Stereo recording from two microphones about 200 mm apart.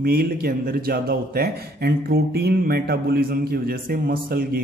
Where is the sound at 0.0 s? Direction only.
50° right (ahead or behind).